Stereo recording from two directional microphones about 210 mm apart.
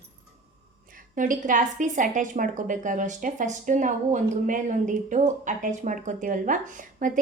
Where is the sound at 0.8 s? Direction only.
40° right (ahead or behind).